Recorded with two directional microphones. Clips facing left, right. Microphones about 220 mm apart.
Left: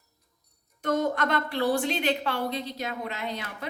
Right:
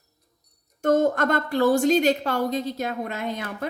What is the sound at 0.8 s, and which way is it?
A woman's voice, 45° right (ahead or behind).